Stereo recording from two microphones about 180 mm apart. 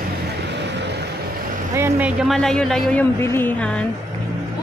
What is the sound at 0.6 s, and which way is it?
Vehicle, 75° right (ahead or behind).